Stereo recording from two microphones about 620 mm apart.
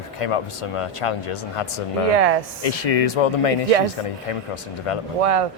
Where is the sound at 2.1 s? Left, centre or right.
Right.